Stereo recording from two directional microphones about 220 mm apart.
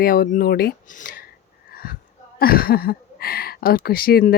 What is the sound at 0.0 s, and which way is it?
A woman's voice, 40° left (ahead or behind).